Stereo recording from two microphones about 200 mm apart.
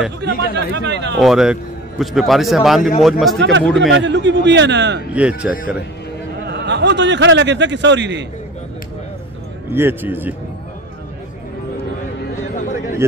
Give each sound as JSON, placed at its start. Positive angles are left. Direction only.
{"t": 0.2, "sound": "speech", "side_deg": -60}
{"t": 1.2, "sound": "a man's voice", "side_deg": 0}
{"t": 3.3, "sound": "speech", "side_deg": -65}
{"t": 3.6, "sound": "a man's voice", "side_deg": 0}
{"t": 3.9, "sound": "speech", "side_deg": -65}
{"t": 5.1, "sound": "a man's voice", "side_deg": -5}
{"t": 6.4, "sound": "speech", "side_deg": -60}
{"t": 9.7, "sound": "a man's voice", "side_deg": -10}
{"t": 12.5, "sound": "a sound", "side_deg": 40}